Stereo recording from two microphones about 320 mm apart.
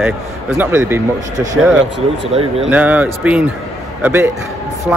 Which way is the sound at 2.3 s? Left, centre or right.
Centre.